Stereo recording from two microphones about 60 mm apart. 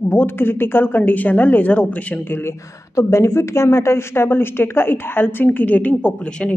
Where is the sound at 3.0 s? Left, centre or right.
Left.